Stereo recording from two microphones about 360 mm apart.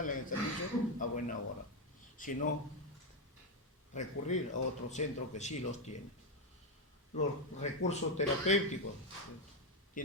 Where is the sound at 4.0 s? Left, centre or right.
Centre.